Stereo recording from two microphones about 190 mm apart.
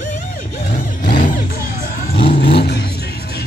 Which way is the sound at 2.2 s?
55° left (ahead or behind).